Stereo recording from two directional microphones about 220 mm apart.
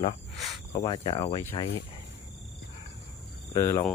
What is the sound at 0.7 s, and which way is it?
Speech, 20° left (ahead or behind).